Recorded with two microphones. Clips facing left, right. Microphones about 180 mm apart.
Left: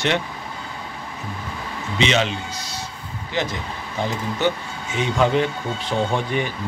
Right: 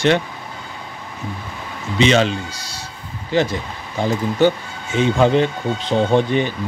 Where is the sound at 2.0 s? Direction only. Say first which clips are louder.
Right 5 dB; 40° right (ahead or behind).